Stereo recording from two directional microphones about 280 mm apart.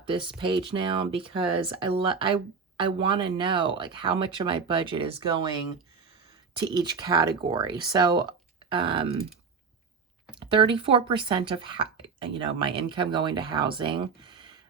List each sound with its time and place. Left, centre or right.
0.0 s speech: centre
6.6 s speech: centre
10.4 s speech: centre